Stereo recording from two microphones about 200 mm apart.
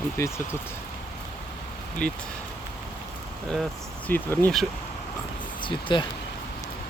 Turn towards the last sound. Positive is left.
turn(degrees=25)  # may be behind; listen again after turning